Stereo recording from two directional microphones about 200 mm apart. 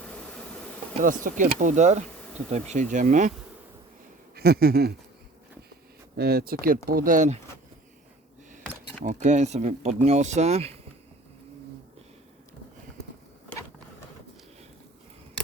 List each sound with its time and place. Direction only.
1.0 s speech: 40° right (ahead or behind)
4.4 s a sound: 50° right (ahead or behind)
6.1 s speech: 50° right (ahead or behind)
9.0 s speech: 35° right (ahead or behind)